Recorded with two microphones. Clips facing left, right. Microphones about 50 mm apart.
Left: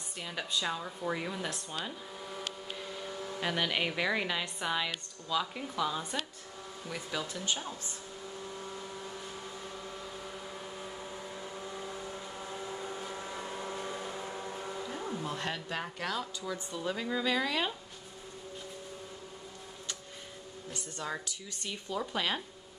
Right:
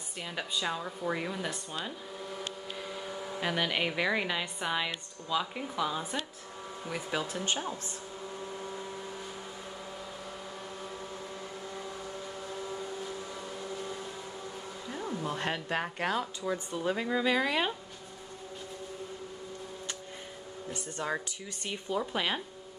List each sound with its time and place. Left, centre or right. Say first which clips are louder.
0.2 s speech: right 1 dB; centre
1.9 s vehicle: right 2 dB; centre
2.7 s speech: right 2 dB; centre; by 7.7 s right
12.8 s vehicle: right 1 dB; left
14.8 s a sound: right 3 dB; centre
15.2 s speech: right 3 dB; right
20.7 s speech: right 4 dB; right